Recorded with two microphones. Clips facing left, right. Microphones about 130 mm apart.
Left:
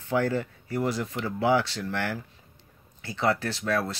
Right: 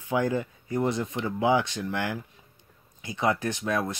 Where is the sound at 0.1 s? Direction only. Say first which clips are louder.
Even; 15° right (ahead or behind).